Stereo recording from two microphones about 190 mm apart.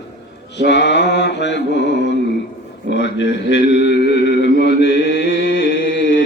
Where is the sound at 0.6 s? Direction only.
65° left (ahead or behind).